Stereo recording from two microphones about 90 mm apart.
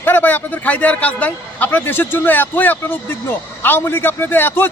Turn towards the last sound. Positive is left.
turn(degrees=25)  # may be behind; listen again after turning